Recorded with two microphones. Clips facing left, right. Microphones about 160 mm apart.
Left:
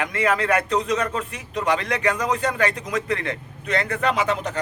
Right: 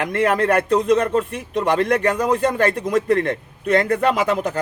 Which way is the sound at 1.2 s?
50° right (ahead or behind).